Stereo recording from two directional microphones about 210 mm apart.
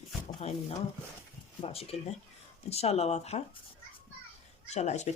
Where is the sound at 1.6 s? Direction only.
30° left (ahead or behind).